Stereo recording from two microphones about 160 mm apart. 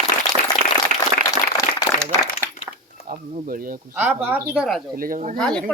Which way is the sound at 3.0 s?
50° right (ahead or behind).